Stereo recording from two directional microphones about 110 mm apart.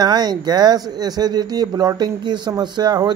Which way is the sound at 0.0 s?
40° right (ahead or behind).